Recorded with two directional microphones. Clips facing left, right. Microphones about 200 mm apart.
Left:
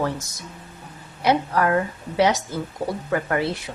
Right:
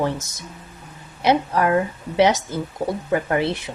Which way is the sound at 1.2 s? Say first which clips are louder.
Right 1 dB; 20° right (ahead or behind).